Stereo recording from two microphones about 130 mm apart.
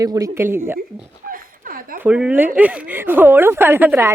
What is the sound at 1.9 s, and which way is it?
Speech, 10° right (ahead or behind).